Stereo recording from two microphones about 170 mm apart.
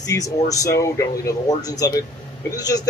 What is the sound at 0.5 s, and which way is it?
Speech, 20° left (ahead or behind).